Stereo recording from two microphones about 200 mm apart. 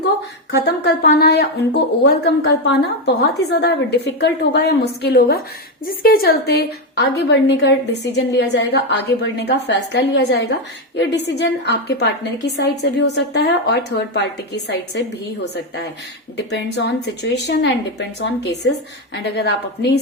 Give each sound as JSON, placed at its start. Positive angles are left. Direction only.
{"t": 0.5, "sound": "a woman's voice", "side_deg": 55}
{"t": 3.5, "sound": "a woman's voice", "side_deg": 55}